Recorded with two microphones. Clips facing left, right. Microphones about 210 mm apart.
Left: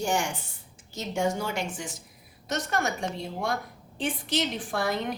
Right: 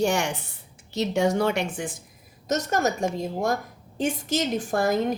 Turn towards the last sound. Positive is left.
turn(degrees=-45)  # may be behind; listen again after turning